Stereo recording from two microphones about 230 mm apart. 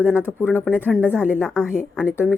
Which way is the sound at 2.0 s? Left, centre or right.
Centre.